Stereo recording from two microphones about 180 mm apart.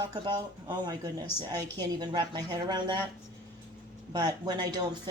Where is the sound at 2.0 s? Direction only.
25° right (ahead or behind).